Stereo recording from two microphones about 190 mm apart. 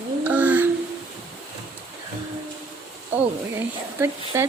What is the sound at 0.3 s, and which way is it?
Child singing, 10° right (ahead or behind).